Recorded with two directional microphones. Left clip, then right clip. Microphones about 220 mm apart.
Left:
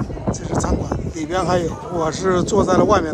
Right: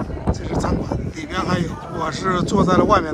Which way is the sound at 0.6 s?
15° left (ahead or behind).